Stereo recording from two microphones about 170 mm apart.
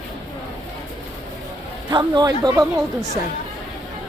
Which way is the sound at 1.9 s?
25° right (ahead or behind).